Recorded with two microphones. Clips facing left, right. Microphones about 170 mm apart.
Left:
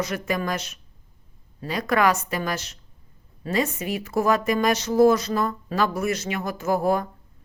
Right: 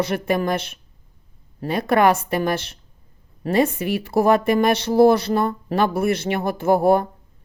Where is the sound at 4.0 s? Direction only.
30° right (ahead or behind).